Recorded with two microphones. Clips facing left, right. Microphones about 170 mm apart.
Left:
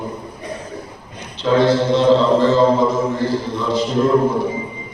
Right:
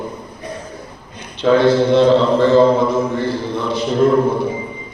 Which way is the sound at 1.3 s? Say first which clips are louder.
Right 2 dB; 60° right (ahead or behind).